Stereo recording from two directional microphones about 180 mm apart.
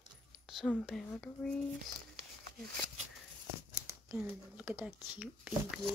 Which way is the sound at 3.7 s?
5° right (ahead or behind).